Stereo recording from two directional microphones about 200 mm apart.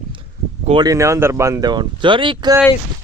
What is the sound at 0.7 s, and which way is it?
Speech, 20° right (ahead or behind).